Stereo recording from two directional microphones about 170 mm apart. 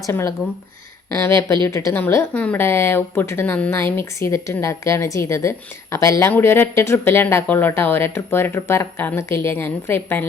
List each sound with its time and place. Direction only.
0.1 s speech: 15° left (ahead or behind)